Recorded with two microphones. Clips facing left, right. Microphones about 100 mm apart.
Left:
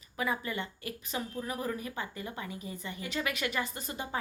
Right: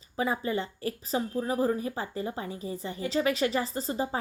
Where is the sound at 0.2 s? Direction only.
30° right (ahead or behind).